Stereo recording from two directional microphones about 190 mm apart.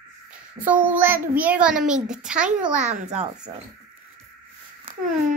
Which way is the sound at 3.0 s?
35° right (ahead or behind).